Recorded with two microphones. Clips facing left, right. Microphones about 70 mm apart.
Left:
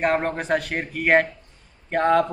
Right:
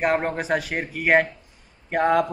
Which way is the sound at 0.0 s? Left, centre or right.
Centre.